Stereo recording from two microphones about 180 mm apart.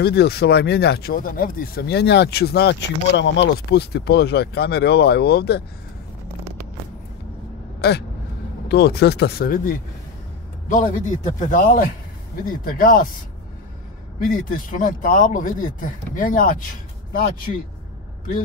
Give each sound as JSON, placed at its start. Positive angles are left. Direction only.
{"t": 0.0, "sound": "speech", "side_deg": 65}
{"t": 7.8, "sound": "speech", "side_deg": 65}
{"t": 14.2, "sound": "speech", "side_deg": 50}